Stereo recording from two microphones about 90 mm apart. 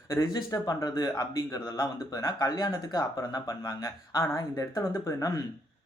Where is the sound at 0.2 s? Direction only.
50° left (ahead or behind).